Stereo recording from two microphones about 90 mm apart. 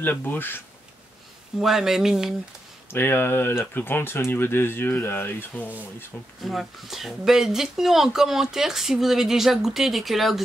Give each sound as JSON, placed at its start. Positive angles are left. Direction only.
{"t": 0.0, "sound": "speech", "side_deg": 20}
{"t": 1.6, "sound": "speech", "side_deg": -5}
{"t": 2.9, "sound": "speech", "side_deg": 25}
{"t": 6.4, "sound": "speech", "side_deg": 0}